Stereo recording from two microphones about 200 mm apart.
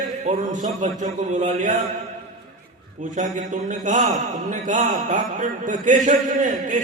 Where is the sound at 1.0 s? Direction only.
35° right (ahead or behind).